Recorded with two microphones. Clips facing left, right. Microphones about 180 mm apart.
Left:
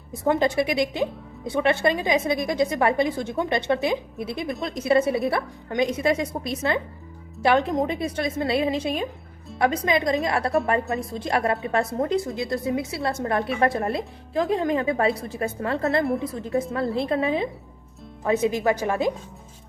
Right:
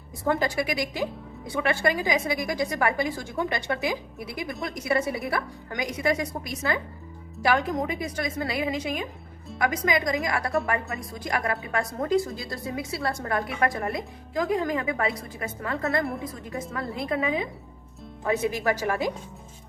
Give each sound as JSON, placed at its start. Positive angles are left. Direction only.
{"t": 0.3, "sound": "a woman's voice", "side_deg": 25}
{"t": 18.3, "sound": "a woman's voice", "side_deg": 20}